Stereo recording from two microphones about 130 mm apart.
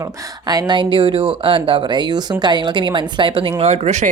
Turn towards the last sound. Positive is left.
turn(degrees=-55)  # may be behind; listen again after turning